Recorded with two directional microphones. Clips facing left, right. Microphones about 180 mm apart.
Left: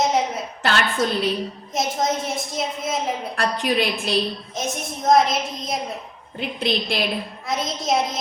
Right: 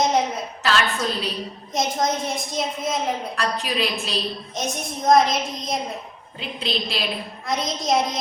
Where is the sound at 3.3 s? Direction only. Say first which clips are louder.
Left 3 dB; 50° left (ahead or behind).